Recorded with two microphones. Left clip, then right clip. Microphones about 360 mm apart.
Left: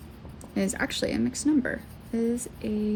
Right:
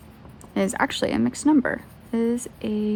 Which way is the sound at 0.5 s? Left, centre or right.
Centre.